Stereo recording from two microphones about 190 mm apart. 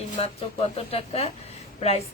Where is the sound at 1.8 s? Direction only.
35° left (ahead or behind).